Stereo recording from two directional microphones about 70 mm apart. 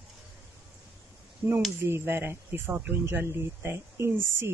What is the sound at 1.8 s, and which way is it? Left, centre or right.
Speech, right.